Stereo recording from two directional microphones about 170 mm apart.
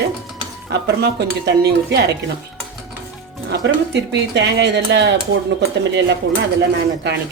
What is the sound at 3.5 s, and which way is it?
Speech, 90° right.